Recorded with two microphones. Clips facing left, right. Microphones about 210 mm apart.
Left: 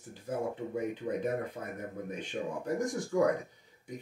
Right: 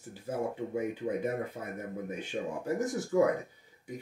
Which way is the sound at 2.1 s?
5° right (ahead or behind).